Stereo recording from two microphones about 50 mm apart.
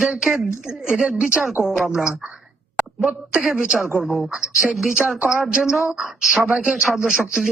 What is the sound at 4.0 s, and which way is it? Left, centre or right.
Speech, centre.